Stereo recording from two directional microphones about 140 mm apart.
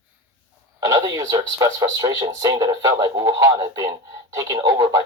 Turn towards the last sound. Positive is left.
turn(degrees=-25)  # may be behind; listen again after turning